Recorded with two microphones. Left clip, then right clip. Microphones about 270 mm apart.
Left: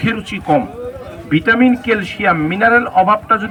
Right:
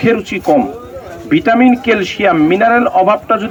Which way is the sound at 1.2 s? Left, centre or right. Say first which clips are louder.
Right 3 dB; centre.